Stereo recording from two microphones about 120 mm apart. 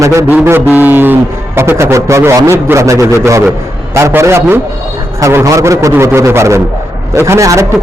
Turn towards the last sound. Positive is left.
turn(degrees=-25)  # may be behind; listen again after turning